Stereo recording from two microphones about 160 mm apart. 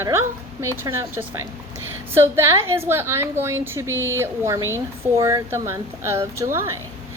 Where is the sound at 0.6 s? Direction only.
15° right (ahead or behind).